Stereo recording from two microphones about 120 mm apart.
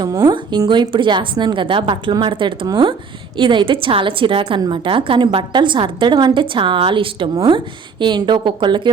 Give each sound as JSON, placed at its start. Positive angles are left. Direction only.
{"t": 0.0, "sound": "a woman's voice", "side_deg": -30}